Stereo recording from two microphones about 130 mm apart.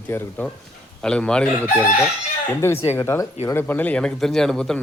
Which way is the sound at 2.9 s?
20° left (ahead or behind).